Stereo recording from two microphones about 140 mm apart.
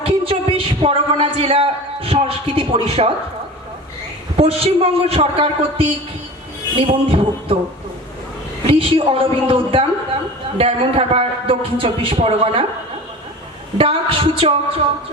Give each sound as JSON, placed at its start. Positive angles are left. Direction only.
{"t": 0.0, "sound": "a sound", "side_deg": -40}
{"t": 4.4, "sound": "a man's voice", "side_deg": -45}
{"t": 8.6, "sound": "a woman's voice", "side_deg": -40}
{"t": 13.7, "sound": "a woman's voice", "side_deg": -40}